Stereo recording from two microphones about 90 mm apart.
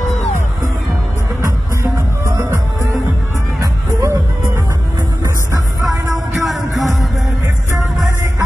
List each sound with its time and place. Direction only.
1.4 s music: 30° right (ahead or behind)
3.5 s music: 40° right (ahead or behind)
6.4 s music: centre (ahead or behind)
7.4 s music: 30° right (ahead or behind)